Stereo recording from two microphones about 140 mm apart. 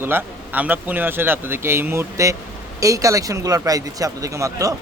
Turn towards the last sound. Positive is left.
turn(degrees=-25)  # may be behind; listen again after turning